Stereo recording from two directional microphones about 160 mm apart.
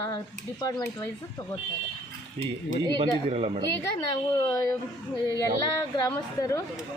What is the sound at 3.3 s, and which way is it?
Speech, 40° right (ahead or behind).